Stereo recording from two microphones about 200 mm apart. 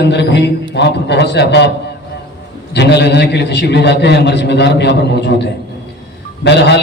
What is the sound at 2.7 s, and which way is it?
A man's voice, 60° left (ahead or behind).